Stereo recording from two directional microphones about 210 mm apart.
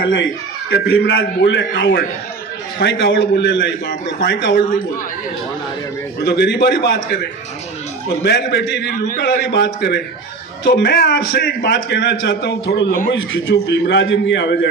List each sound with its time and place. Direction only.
0.7 s a man's voice: 50° left (ahead or behind)
6.2 s a man's voice: 55° left (ahead or behind)
13.1 s a man's voice: 65° left (ahead or behind)